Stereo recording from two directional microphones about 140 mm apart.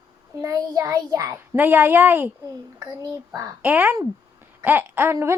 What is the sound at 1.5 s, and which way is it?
A woman's voice, 15° right (ahead or behind).